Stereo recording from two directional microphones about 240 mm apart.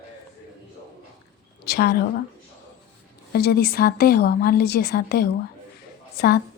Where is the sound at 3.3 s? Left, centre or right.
Left.